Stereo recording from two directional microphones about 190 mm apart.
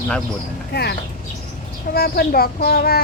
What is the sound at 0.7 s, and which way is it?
Speech, 60° left (ahead or behind).